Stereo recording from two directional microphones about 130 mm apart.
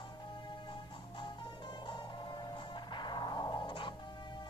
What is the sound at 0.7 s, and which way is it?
Music, 40° left (ahead or behind).